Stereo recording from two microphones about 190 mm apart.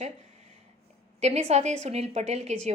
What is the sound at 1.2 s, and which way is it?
A woman's voice, 35° right (ahead or behind).